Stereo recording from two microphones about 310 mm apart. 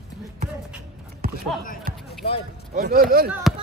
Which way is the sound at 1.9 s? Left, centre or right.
Right.